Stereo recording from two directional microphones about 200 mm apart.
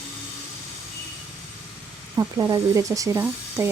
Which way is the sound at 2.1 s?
20° right (ahead or behind).